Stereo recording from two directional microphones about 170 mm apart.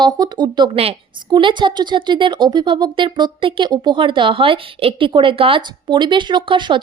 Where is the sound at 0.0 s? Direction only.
25° right (ahead or behind).